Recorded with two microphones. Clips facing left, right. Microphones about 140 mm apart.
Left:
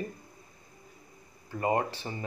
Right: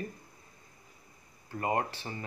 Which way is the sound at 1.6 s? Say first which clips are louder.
Left 3 dB; 20° left (ahead or behind).